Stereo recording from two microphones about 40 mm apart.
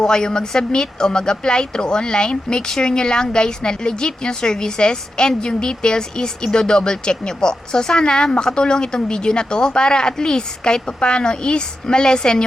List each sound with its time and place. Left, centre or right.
0.0 s speech: centre